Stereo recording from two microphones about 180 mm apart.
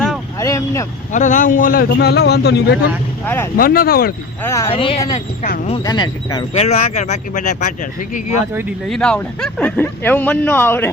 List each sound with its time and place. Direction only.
0.3 s vehicle: 15° left (ahead or behind)
1.1 s speech: 45° left (ahead or behind); by 2.7 s 65° left (ahead or behind)
3.2 s speech: 15° left (ahead or behind)
3.6 s speech: 55° left (ahead or behind)
4.4 s speech: 15° left (ahead or behind)
4.7 s speech: 30° left (ahead or behind)
5.4 s speech: 45° left (ahead or behind)
5.8 s speech: 25° left (ahead or behind)
6.6 s speech: 35° left (ahead or behind)
8.9 s speech: 5° left (ahead or behind)